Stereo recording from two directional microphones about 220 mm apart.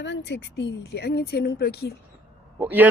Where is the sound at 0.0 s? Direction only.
55° left (ahead or behind).